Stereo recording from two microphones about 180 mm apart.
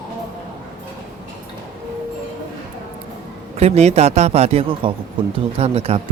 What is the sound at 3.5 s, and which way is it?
Speech, 35° right (ahead or behind).